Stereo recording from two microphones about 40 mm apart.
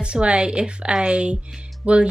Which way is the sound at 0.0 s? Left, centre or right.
Right.